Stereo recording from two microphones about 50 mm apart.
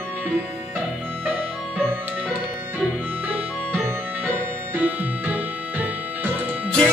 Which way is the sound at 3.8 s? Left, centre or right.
Right.